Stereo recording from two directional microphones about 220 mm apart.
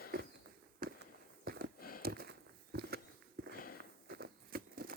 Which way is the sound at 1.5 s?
45° right (ahead or behind).